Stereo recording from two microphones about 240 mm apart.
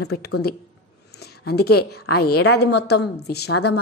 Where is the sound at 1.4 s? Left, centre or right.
Left.